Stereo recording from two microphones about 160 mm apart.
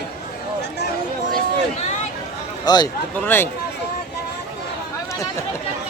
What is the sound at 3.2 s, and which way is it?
Speech, 15° left (ahead or behind).